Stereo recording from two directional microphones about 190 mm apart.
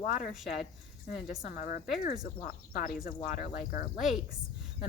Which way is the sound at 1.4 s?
40° left (ahead or behind).